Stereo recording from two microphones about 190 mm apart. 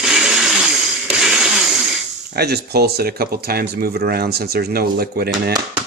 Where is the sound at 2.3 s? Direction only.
55° right (ahead or behind).